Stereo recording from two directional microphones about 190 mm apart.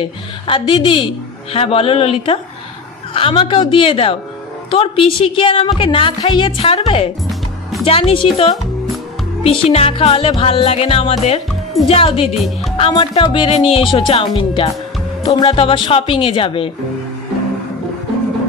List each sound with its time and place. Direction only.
0.0 s speech: 25° left (ahead or behind)
9.4 s music: 30° left (ahead or behind)
12.7 s speech: 30° left (ahead or behind)